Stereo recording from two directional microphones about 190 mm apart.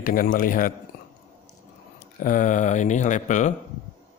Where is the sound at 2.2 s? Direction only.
45° left (ahead or behind).